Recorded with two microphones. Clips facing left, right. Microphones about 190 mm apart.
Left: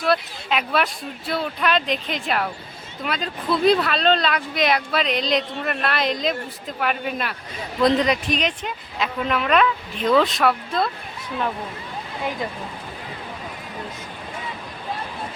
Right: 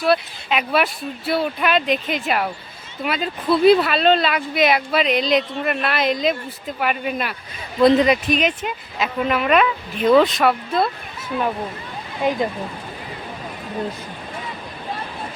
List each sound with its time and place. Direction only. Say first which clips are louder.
0.0 s speech: right 3 dB; 5° right (ahead or behind)
12.2 s speech: right 8 dB; 15° right (ahead or behind)